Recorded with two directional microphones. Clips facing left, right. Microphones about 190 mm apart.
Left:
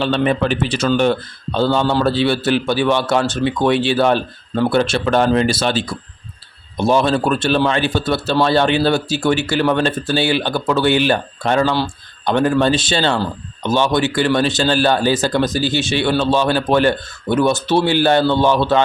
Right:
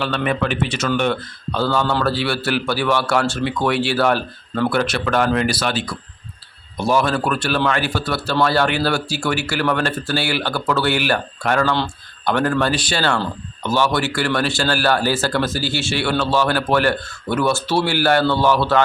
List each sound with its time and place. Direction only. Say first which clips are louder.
0.0 s a man's voice: left 4 dB; 25° left (ahead or behind)